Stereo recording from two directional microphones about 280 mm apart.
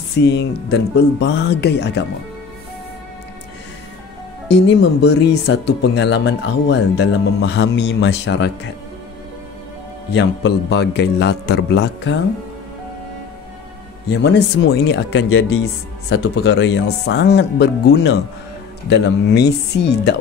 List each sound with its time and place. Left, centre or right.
0.2 s speech: left
4.6 s speech: left
10.1 s speech: left
14.0 s speech: left